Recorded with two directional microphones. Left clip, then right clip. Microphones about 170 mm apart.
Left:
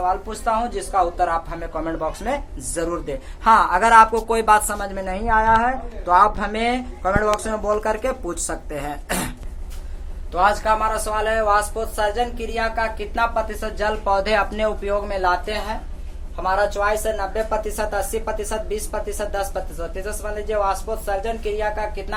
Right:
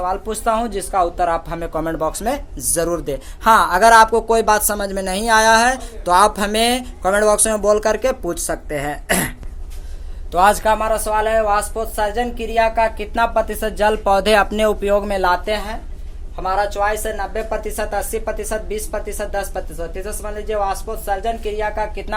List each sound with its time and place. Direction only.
0.0 s speech: 65° right (ahead or behind)
8.7 s a woman's voice: 45° right (ahead or behind)
10.3 s speech: 75° right (ahead or behind)
16.4 s a woman's voice: 40° right (ahead or behind)